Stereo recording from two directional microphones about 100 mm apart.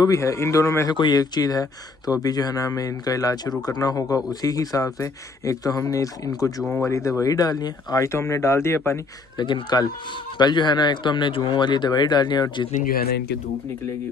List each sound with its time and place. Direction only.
0.0 s speech: 35° left (ahead or behind)
0.8 s speech: 45° left (ahead or behind); by 9.0 s 25° left (ahead or behind)
9.4 s a man's voice: 45° left (ahead or behind)